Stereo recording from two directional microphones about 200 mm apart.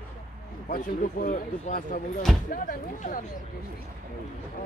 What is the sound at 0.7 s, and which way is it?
Speech, 45° left (ahead or behind).